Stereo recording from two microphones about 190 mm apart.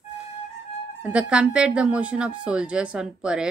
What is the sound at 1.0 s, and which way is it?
Speech, 5° right (ahead or behind).